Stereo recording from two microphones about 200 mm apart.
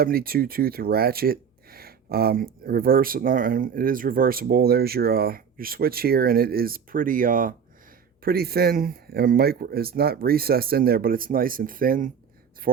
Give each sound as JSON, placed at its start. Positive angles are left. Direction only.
{"t": 0.0, "sound": "speech", "side_deg": -50}